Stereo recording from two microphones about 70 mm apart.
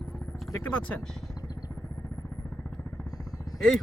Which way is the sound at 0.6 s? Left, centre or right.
Centre.